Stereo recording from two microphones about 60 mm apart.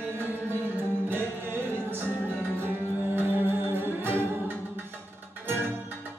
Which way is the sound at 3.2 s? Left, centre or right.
Right.